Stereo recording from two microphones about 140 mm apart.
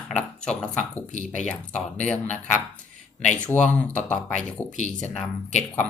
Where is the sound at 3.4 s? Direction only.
10° left (ahead or behind).